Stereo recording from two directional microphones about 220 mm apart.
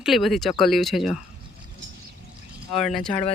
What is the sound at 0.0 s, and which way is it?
Speech, centre (ahead or behind).